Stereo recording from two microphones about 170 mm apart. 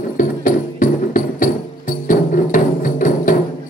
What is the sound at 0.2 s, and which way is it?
Music, 50° left (ahead or behind).